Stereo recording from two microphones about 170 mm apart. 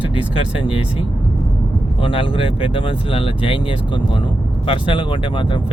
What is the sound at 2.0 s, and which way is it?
Speech, 30° left (ahead or behind).